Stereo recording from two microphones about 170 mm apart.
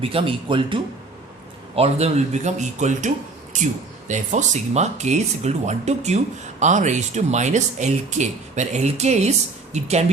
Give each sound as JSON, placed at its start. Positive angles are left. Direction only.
{"t": 0.0, "sound": "speech", "side_deg": -30}